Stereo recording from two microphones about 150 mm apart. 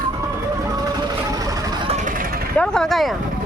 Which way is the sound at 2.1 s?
70° right (ahead or behind).